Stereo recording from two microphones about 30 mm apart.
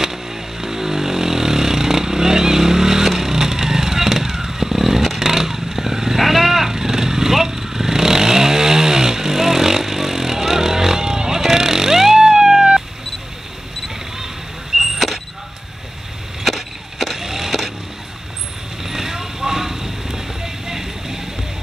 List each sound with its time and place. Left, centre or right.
0.0 s vehicle: centre
14.8 s a sound: centre
16.4 s wood: centre
17.2 s vehicle: centre
18.8 s vehicle: centre